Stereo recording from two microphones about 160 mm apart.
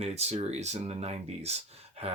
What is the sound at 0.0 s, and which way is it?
Speech, 40° right (ahead or behind).